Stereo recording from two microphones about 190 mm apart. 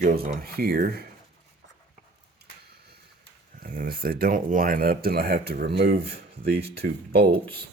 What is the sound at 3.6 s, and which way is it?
Speech, 50° right (ahead or behind).